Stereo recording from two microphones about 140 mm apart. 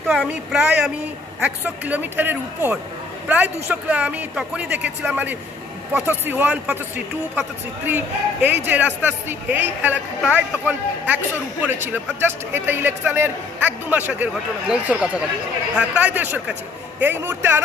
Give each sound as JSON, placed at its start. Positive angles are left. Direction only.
{"t": 0.1, "sound": "a man's voice", "side_deg": -5}